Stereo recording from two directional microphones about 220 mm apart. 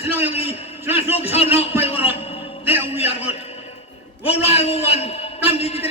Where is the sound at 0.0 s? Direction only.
25° left (ahead or behind).